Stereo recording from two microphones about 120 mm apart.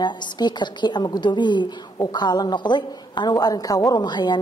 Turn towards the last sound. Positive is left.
turn(degrees=40)  # may be behind; listen again after turning